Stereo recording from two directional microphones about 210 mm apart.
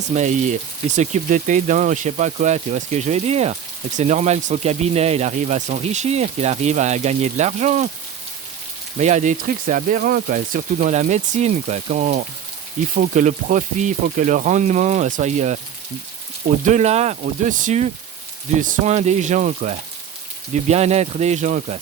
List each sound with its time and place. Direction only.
0.1 s speech: 35° right (ahead or behind)
9.0 s speech: 35° right (ahead or behind)
16.6 s speech: 30° right (ahead or behind)